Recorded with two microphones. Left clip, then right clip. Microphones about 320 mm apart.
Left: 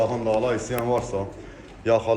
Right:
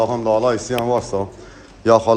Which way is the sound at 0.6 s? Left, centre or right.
Centre.